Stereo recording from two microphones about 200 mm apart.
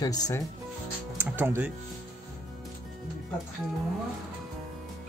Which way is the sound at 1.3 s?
10° right (ahead or behind).